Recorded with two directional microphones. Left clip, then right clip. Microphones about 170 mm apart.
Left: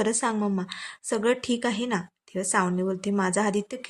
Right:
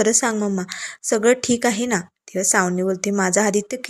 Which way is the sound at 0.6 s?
20° right (ahead or behind).